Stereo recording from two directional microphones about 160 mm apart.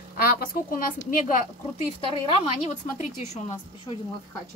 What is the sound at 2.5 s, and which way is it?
A woman's voice, 45° left (ahead or behind).